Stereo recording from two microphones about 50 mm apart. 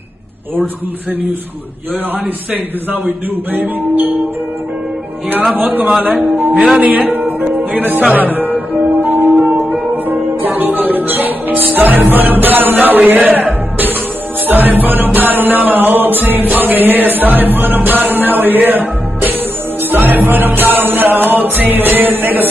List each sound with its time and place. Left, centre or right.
3.5 s music: right
5.6 s music: right
6.5 s speech: centre
6.8 s speech: right
7.2 s music: right